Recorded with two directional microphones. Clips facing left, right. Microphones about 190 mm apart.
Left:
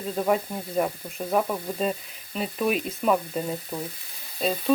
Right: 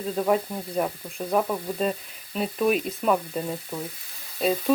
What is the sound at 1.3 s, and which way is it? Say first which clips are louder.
Frying: right 1 dB; centre (ahead or behind).